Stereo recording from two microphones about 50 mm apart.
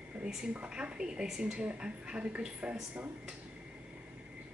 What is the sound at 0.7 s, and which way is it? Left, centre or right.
Speech, centre.